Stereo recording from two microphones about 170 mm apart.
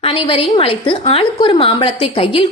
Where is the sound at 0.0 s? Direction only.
35° left (ahead or behind).